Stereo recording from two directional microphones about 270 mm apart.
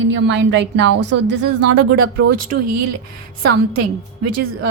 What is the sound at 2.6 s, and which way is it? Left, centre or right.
Speech, right.